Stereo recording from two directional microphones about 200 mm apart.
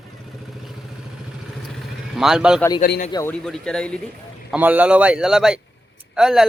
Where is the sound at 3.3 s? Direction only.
5° left (ahead or behind).